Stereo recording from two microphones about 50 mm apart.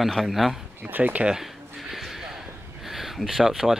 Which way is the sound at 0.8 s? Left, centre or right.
Right.